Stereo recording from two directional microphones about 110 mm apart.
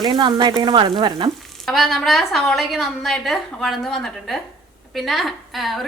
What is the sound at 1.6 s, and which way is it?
A woman's voice, centre (ahead or behind).